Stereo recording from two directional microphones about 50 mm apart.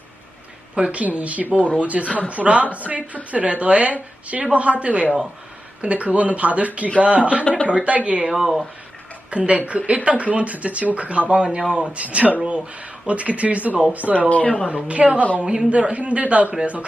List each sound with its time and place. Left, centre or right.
0.8 s a woman's voice: right
8.4 s speech: centre
9.3 s a woman's voice: right
14.3 s speech: left
14.7 s speech: right